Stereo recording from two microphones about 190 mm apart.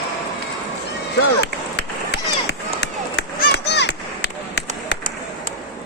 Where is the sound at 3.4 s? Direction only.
60° left (ahead or behind).